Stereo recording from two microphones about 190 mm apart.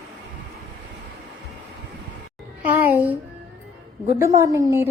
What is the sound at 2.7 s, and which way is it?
Music, 10° right (ahead or behind).